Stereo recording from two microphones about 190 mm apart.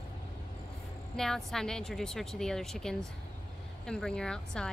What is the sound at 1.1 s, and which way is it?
A woman's voice, centre (ahead or behind).